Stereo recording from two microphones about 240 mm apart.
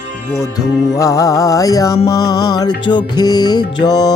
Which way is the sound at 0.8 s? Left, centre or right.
Centre.